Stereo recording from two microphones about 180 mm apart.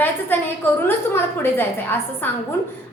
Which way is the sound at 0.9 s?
10° left (ahead or behind).